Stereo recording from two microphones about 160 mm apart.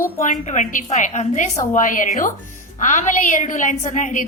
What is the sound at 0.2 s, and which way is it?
A woman's voice, 45° left (ahead or behind).